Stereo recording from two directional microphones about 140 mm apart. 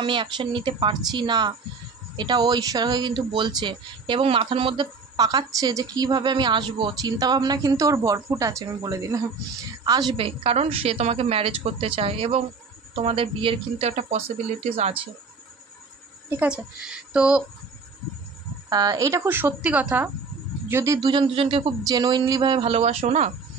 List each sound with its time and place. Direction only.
0.0 s a woman's voice: 35° right (ahead or behind)
10.1 s a woman's voice: 40° right (ahead or behind)
16.3 s a woman's voice: 10° right (ahead or behind)
18.7 s a woman's voice: 25° right (ahead or behind)
21.1 s a woman's voice: 40° right (ahead or behind)